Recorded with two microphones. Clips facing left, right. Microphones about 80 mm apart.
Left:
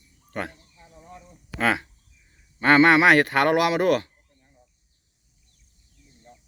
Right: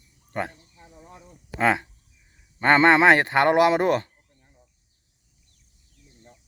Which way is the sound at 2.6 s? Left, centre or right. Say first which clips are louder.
Even; right.